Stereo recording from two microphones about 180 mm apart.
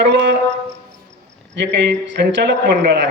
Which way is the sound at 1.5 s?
75° right (ahead or behind).